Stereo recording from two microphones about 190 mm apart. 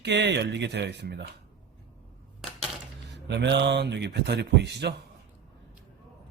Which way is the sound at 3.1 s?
65° right (ahead or behind).